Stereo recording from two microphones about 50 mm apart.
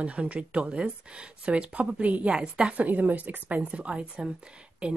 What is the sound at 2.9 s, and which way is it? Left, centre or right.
Speech, right.